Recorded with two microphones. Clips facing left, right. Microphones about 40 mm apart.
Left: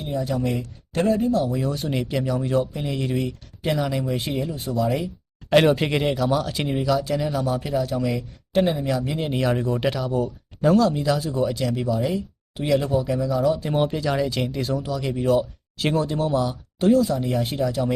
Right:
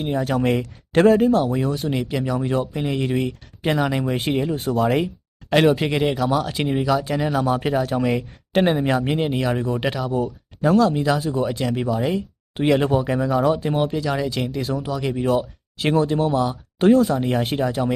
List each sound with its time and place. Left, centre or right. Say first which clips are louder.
0.0 s speech: right 4 dB; right
1.6 s speech: right 2 dB; centre; by 4.6 s right
4.6 s speech: right 3 dB; right
5.5 s speech: even; centre; by 7.3 s right
7.3 s speech: right 4 dB; right
9.3 s speech: even; centre; by 13.6 s right
13.7 s speech: even; centre
16.7 s speech: right 3 dB; right